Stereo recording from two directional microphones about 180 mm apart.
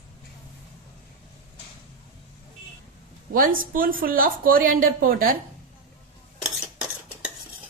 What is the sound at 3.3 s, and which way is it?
Speech, 50° right (ahead or behind).